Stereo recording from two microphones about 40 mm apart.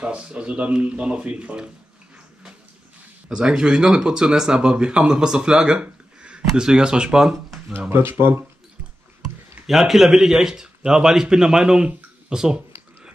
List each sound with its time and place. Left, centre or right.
0.0 s speech: right
3.3 s speech: centre
5.8 s a sound: right
6.5 s a man's voice: centre
7.9 s speech: right
9.7 s a man's voice: centre
11.6 s speech: right
12.3 s a sound: centre